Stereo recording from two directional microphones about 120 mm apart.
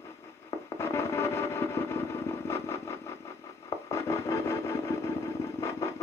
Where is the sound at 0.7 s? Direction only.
20° left (ahead or behind).